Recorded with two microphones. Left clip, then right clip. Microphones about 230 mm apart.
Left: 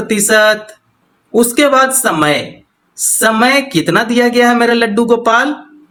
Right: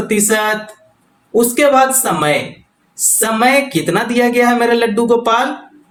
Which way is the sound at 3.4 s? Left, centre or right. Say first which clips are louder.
Left 1 dB; left.